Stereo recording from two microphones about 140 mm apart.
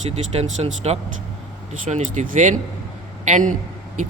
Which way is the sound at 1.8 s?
65° right (ahead or behind).